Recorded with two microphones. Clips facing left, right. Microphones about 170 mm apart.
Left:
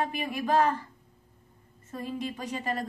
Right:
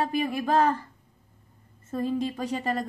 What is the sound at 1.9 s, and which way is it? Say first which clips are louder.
Speech: right 7 dB; 35° right (ahead or behind).